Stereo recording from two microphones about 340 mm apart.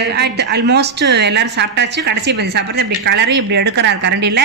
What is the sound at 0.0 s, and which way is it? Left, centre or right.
A woman's voice, right.